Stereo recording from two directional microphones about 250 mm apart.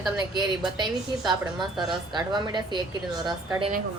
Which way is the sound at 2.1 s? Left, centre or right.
Centre.